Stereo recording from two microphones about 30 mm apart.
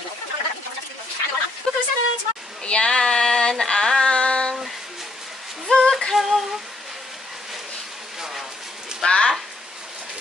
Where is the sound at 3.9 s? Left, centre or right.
Left.